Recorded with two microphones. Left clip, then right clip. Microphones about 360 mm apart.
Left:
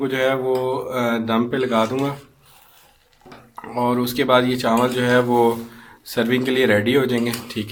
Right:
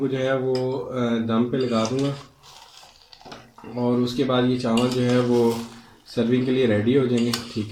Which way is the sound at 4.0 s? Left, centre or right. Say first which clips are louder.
Left 6 dB; left.